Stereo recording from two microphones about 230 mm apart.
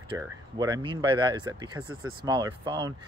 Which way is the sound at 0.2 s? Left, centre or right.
Centre.